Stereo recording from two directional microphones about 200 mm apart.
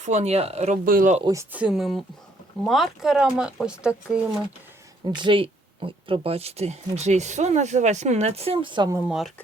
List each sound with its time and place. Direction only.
0.0 s speech: 35° right (ahead or behind)
1.2 s speech: 15° right (ahead or behind)
5.0 s speech: 25° right (ahead or behind)
9.0 s speech: centre (ahead or behind)